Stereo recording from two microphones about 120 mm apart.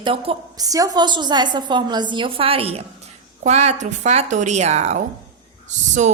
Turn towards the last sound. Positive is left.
turn(degrees=-80)